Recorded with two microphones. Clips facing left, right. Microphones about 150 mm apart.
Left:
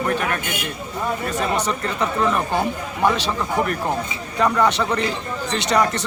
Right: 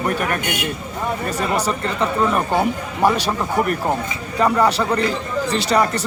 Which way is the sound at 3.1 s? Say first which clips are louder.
Right 2 dB; 10° right (ahead or behind).